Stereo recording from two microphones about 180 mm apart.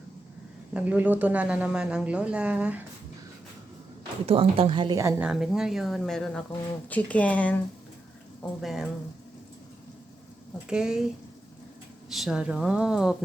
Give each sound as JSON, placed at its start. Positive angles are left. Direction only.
{"t": 0.7, "sound": "speech", "side_deg": -10}
{"t": 4.3, "sound": "speech", "side_deg": -30}
{"t": 4.9, "sound": "speech", "side_deg": -15}
{"t": 5.3, "sound": "speech", "side_deg": -5}
{"t": 8.6, "sound": "speech", "side_deg": 0}
{"t": 10.7, "sound": "speech", "side_deg": -5}
{"t": 12.0, "sound": "speech", "side_deg": 0}